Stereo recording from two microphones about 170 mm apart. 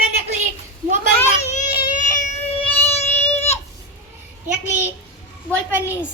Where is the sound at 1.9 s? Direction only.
45° left (ahead or behind).